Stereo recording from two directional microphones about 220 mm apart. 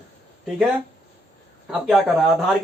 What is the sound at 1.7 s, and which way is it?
Speech, centre (ahead or behind).